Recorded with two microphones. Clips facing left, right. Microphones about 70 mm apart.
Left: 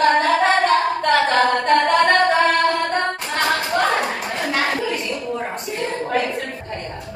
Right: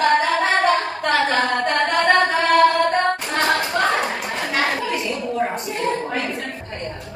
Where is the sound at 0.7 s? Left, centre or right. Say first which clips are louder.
Left 2 dB; centre.